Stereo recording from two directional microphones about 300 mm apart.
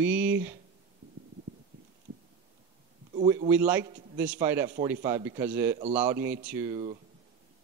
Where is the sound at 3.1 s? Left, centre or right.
Centre.